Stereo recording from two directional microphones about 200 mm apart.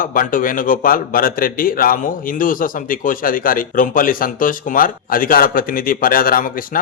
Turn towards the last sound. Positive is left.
turn(degrees=45)  # may be behind; listen again after turning